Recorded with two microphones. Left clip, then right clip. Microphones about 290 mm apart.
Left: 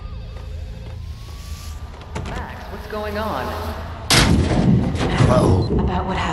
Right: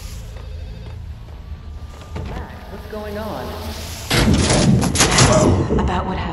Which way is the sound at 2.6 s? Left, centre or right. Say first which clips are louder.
Left 2 dB; left.